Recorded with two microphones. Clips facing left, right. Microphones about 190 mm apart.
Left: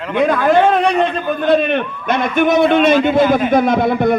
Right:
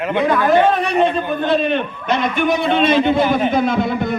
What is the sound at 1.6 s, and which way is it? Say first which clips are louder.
Speech: left 1 dB; 55° left (ahead or behind).